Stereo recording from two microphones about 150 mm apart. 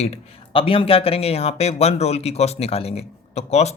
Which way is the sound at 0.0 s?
40° left (ahead or behind).